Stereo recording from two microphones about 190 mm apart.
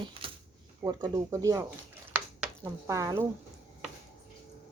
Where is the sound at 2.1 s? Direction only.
10° right (ahead or behind).